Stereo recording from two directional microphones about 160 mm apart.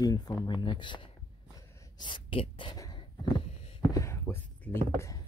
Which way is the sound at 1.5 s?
25° left (ahead or behind).